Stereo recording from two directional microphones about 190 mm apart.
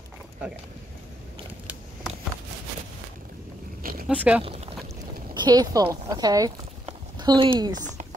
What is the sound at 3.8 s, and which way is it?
Oink, 50° right (ahead or behind).